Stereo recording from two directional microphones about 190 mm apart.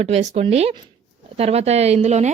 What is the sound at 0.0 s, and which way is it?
Speech, 35° right (ahead or behind).